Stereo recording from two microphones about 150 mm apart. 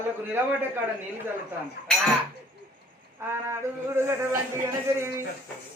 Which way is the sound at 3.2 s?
15° right (ahead or behind).